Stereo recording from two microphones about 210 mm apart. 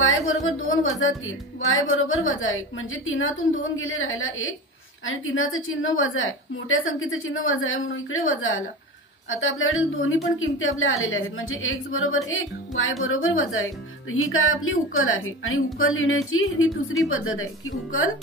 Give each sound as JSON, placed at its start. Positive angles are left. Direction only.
{"t": 0.3, "sound": "speech", "side_deg": 70}